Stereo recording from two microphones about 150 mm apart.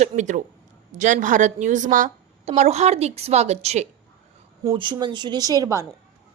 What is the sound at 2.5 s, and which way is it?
A woman's voice, 45° right (ahead or behind).